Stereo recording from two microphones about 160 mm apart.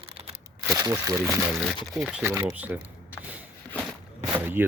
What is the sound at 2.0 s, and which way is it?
Speech, 5° right (ahead or behind).